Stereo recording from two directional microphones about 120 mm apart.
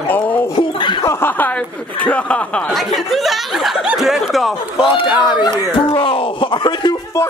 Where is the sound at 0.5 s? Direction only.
40° left (ahead or behind).